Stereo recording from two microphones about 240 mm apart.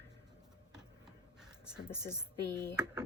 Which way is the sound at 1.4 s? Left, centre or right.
Centre.